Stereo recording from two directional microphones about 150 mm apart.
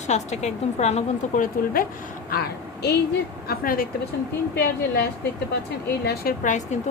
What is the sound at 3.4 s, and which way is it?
Speech, 75° left (ahead or behind).